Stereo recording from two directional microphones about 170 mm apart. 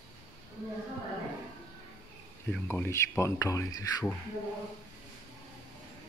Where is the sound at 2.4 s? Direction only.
10° left (ahead or behind).